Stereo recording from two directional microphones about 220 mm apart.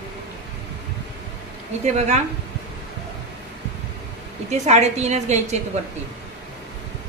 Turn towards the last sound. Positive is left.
turn(degrees=-30)  # may be behind; listen again after turning